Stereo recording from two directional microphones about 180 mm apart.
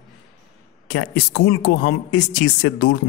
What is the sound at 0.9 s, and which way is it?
Speech, 90° left.